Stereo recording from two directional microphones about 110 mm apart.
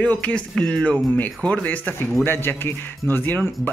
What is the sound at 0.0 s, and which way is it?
A man's voice, 10° left (ahead or behind).